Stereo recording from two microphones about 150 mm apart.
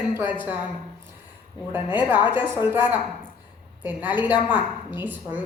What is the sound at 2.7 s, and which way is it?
A woman's voice, 15° right (ahead or behind).